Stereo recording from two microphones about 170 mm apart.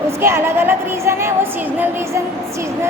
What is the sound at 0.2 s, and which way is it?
A woman's voice, 15° right (ahead or behind).